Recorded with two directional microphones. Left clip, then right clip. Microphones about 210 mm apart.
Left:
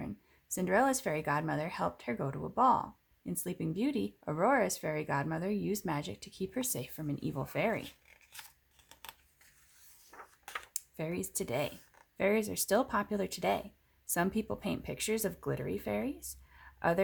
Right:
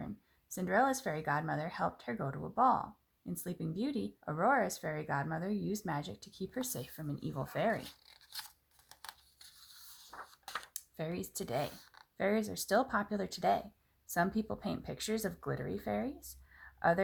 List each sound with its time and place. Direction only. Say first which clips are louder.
0.5 s speech: left 2 dB; 30° left (ahead or behind)
7.9 s a sound: left 1 dB; 10° right (ahead or behind)
10.8 s speech: left 6 dB; 30° left (ahead or behind)